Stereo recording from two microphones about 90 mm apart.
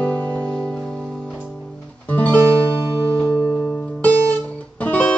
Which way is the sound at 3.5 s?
10° left (ahead or behind).